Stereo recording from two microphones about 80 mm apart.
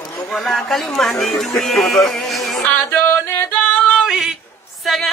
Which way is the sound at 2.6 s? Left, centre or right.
Left.